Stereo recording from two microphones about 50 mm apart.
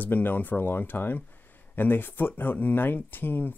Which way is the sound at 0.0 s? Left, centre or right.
Left.